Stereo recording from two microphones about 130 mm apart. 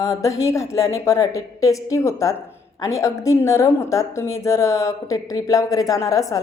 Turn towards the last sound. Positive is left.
turn(degrees=25)  # may be behind; listen again after turning